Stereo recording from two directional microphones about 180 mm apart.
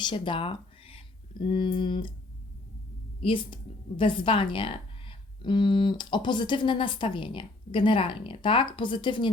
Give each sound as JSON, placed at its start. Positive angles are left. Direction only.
{"t": 0.0, "sound": "speech", "side_deg": 25}
{"t": 3.2, "sound": "a woman's voice", "side_deg": 30}